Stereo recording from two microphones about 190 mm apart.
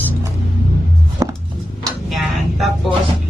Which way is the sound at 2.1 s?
Centre (ahead or behind).